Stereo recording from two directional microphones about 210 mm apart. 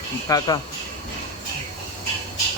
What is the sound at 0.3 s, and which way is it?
Speech, 15° left (ahead or behind).